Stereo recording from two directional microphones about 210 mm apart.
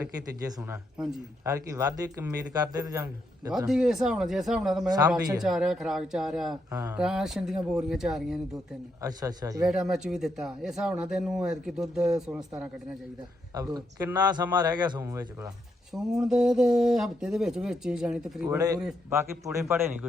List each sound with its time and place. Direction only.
0.0 s a man's voice: 10° right (ahead or behind)
1.5 s a man's voice: 15° right (ahead or behind)
3.7 s speech: centre (ahead or behind)
4.9 s a man's voice: 20° right (ahead or behind)
5.4 s speech: centre (ahead or behind)
6.7 s a man's voice: 15° right (ahead or behind)
7.0 s speech: 5° right (ahead or behind)
9.0 s a man's voice: 15° right (ahead or behind)
9.6 s speech: centre (ahead or behind)
13.5 s a man's voice: 20° right (ahead or behind)
15.9 s speech: centre (ahead or behind)
18.4 s a man's voice: 15° right (ahead or behind)